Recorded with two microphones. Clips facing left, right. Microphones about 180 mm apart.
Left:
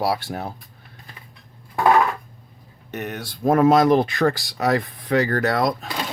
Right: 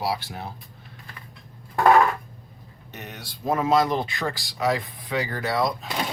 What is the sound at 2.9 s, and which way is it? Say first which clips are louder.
Speech: left 10 dB; 60° left (ahead or behind).